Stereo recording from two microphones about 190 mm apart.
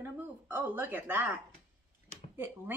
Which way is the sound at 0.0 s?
10° right (ahead or behind).